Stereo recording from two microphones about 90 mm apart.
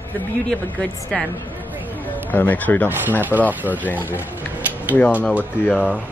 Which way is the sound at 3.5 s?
20° right (ahead or behind).